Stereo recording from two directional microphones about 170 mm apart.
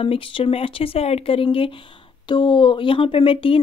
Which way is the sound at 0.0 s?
30° left (ahead or behind).